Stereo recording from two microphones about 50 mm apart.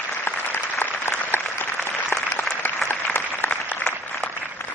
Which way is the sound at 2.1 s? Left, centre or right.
Left.